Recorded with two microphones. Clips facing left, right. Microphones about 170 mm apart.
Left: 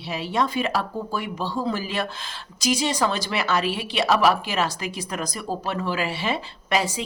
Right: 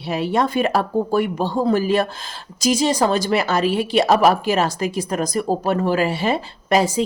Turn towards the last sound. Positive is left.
turn(degrees=-45)  # may be behind; listen again after turning